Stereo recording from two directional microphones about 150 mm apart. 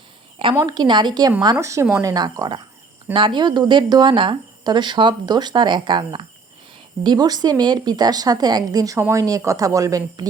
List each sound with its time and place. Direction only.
0.6 s a woman's voice: 25° right (ahead or behind)
1.5 s a woman's voice: 20° right (ahead or behind)